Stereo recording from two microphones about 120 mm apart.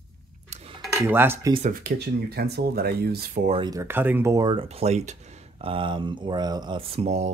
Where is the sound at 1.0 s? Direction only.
20° right (ahead or behind).